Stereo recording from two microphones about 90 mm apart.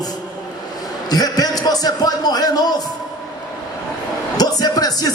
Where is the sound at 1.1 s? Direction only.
45° left (ahead or behind).